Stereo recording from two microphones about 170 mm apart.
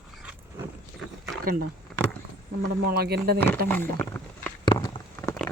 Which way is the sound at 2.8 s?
70° right (ahead or behind).